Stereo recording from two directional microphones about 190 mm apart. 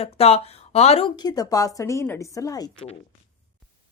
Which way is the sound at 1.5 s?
15° left (ahead or behind).